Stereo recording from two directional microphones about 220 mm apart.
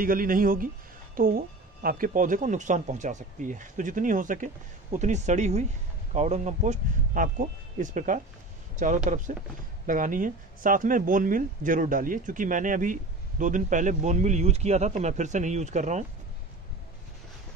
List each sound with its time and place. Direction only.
0.0 s speech: 40° right (ahead or behind)